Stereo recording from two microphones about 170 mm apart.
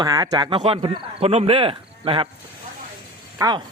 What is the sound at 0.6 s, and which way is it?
Speech, 35° right (ahead or behind).